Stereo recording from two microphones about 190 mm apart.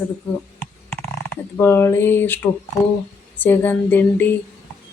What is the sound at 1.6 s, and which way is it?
A woman's voice, 10° left (ahead or behind).